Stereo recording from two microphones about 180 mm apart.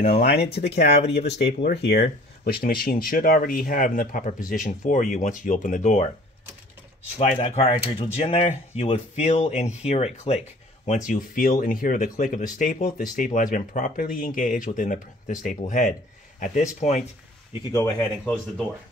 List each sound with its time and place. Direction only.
0.2 s speech: 65° left (ahead or behind); by 6.0 s 45° left (ahead or behind)
7.2 s speech: 35° left (ahead or behind)
11.1 s speech: 50° left (ahead or behind)
17.7 s speech: 10° left (ahead or behind)